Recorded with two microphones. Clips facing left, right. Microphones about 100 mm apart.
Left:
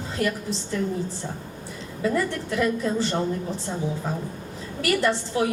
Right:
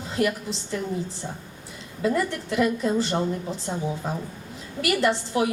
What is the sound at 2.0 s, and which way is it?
A woman's voice, 20° right (ahead or behind).